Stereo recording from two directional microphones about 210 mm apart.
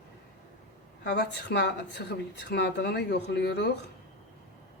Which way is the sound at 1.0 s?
55° left (ahead or behind).